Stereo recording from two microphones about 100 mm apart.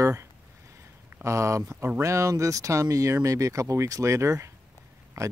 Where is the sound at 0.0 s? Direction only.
30° right (ahead or behind).